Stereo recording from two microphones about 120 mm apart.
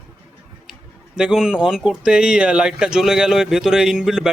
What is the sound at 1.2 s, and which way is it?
Speech, 5° right (ahead or behind).